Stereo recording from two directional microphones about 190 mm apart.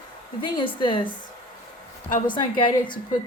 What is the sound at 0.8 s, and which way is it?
Speech, 25° left (ahead or behind).